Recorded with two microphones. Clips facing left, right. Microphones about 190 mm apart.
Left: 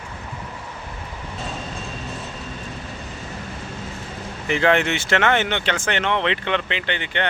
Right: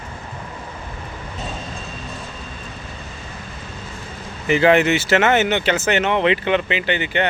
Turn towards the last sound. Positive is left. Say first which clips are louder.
# right 5 dB
turn(degrees=-5)  # may be behind; listen again after turning